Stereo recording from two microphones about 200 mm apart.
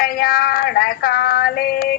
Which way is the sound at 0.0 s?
45° left (ahead or behind).